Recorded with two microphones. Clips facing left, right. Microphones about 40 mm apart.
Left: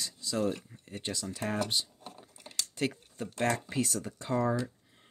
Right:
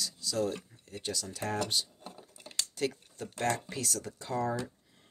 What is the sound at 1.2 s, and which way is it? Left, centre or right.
Speech, centre.